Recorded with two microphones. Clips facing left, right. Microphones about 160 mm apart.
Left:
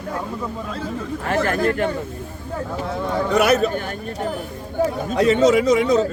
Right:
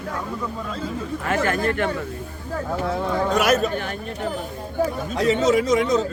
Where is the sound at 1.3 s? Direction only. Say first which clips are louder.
Left 2 dB; 35° left (ahead or behind).